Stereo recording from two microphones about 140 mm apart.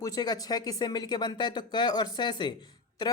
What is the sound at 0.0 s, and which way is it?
A man's voice, 25° left (ahead or behind).